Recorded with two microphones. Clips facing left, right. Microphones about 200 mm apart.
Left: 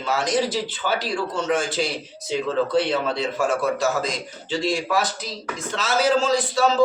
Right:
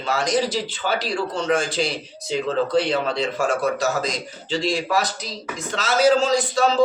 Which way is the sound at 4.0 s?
5° left (ahead or behind).